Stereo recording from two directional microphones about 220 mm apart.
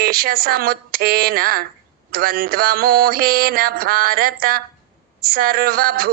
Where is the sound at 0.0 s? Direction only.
40° right (ahead or behind).